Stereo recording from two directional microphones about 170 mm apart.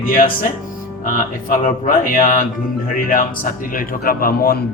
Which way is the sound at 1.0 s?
50° left (ahead or behind).